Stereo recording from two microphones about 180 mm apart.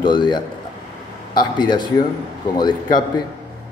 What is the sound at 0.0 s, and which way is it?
Speech, 25° left (ahead or behind).